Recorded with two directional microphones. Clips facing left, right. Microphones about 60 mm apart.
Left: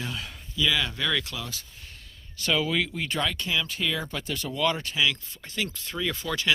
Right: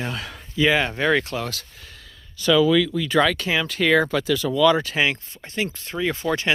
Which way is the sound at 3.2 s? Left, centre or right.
Right.